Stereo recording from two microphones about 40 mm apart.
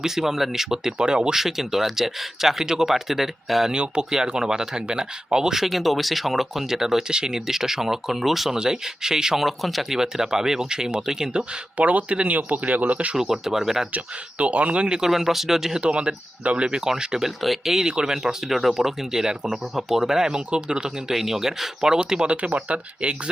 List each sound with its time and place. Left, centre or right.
0.0 s speech: centre
1.4 s speech: centre
3.7 s speech: right; by 8.5 s centre
8.5 s speech: centre
10.0 s speech: centre
11.8 s speech: right
13.1 s speech: centre
13.9 s speech: right
15.0 s speech: centre
15.8 s speech: right
16.6 s speech: centre
17.4 s speech: centre
17.8 s speech: centre
21.1 s speech: centre; by 23.3 s right